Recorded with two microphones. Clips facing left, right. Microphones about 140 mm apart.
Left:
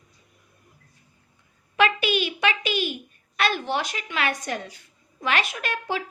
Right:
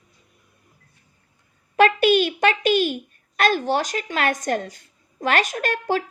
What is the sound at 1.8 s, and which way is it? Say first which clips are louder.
A child's voice: right 6 dB; 45° right (ahead or behind).